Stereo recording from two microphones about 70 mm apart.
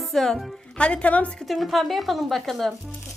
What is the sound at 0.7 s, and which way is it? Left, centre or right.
Speech, centre.